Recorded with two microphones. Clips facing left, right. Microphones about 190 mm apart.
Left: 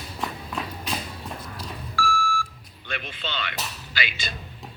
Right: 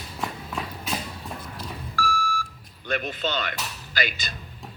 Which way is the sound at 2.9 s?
45° right (ahead or behind).